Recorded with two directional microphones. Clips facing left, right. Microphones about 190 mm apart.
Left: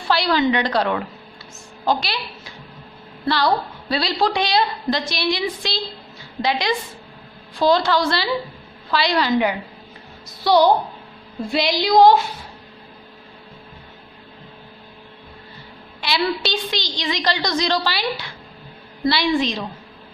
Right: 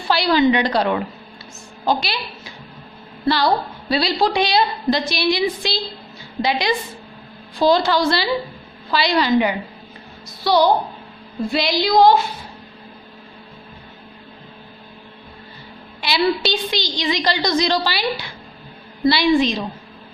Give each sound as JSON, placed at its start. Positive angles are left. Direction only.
{"t": 0.1, "sound": "a woman's voice", "side_deg": -5}
{"t": 10.4, "sound": "a woman's voice", "side_deg": 20}
{"t": 16.0, "sound": "a woman's voice", "side_deg": -5}